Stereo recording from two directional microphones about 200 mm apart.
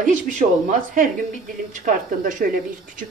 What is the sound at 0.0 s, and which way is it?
Speech, 40° right (ahead or behind).